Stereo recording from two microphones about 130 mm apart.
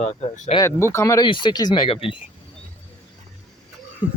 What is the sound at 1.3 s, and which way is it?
Speech, 35° left (ahead or behind).